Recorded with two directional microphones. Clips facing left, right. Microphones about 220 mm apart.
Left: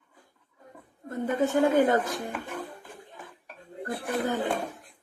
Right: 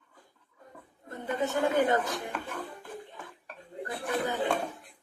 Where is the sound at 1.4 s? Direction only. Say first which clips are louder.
Left 4 dB; 50° left (ahead or behind).